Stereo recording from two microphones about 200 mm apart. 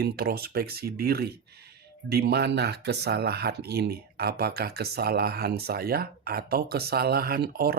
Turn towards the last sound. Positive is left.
turn(degrees=-50)  # may be behind; listen again after turning